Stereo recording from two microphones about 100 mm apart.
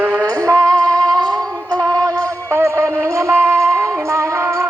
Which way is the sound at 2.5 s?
25° right (ahead or behind).